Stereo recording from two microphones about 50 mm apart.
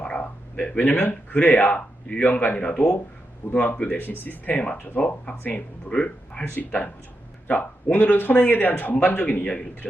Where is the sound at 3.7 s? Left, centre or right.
Left; by 6.4 s centre.